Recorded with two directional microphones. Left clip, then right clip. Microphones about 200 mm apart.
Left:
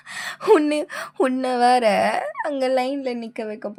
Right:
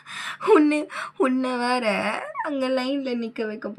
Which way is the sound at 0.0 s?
55° left (ahead or behind).